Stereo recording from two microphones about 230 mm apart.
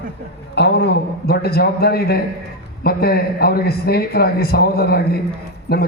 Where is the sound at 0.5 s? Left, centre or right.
Left.